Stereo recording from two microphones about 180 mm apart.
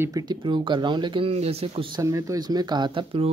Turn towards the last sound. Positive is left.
turn(degrees=-30)  # may be behind; listen again after turning